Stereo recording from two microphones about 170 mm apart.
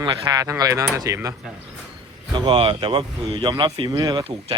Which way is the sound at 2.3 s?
30° right (ahead or behind).